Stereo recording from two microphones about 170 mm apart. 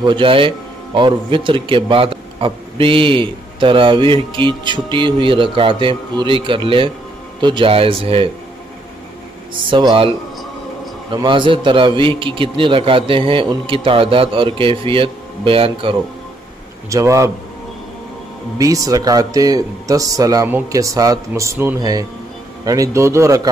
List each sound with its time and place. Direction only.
0.0 s a man's voice: 30° right (ahead or behind)
9.7 s speech: 30° right (ahead or behind)
11.1 s a man's voice: 30° right (ahead or behind)
16.9 s a man's voice: 20° right (ahead or behind)
18.6 s speech: 20° right (ahead or behind)